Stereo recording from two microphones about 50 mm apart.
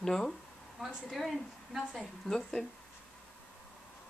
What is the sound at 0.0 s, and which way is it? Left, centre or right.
Speech, centre.